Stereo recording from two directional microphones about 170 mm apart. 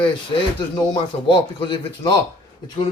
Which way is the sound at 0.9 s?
30° left (ahead or behind).